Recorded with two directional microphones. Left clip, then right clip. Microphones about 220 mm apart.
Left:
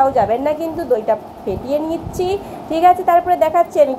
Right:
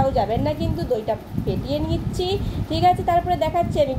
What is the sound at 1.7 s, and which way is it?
A woman's voice, 40° left (ahead or behind).